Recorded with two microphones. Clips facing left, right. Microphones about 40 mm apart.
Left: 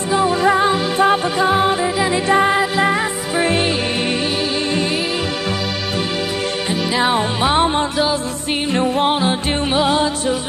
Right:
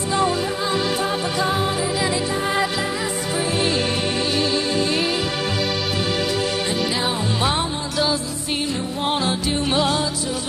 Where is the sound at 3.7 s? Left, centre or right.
Left.